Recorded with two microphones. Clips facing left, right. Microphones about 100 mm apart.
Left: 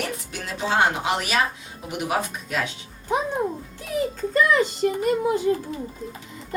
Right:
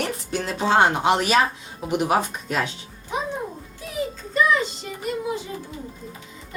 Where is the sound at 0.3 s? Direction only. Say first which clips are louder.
Right 7 dB; 35° right (ahead or behind).